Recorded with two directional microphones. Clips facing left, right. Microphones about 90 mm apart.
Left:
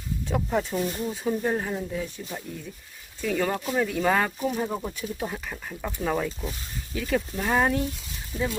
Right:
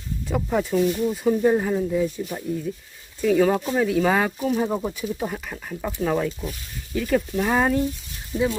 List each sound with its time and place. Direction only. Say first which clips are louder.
0.3 s speech: right 3 dB; centre (ahead or behind)
4.7 s speech: right 5 dB; 15° right (ahead or behind)
4.9 s speech: right 4 dB; 5° right (ahead or behind)